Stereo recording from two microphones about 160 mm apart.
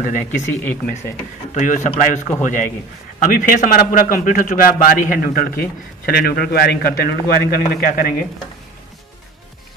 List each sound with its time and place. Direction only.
0.0 s a man's voice: 50° left (ahead or behind); by 8.1 s 65° left (ahead or behind)